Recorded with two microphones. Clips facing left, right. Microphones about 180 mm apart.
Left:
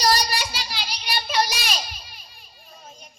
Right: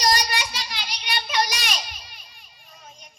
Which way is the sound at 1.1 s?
30° left (ahead or behind).